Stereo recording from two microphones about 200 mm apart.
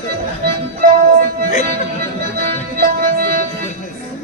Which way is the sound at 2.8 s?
45° right (ahead or behind).